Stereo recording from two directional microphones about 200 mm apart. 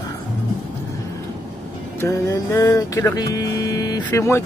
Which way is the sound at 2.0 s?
15° left (ahead or behind).